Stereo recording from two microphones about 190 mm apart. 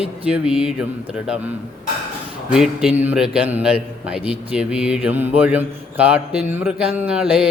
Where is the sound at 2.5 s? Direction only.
5° right (ahead or behind).